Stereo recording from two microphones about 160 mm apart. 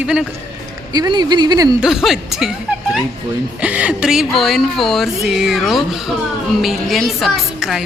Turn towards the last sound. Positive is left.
turn(degrees=0)  # may be behind; listen again after turning